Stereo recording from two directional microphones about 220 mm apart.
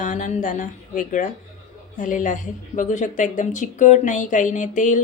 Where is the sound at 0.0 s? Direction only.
35° left (ahead or behind).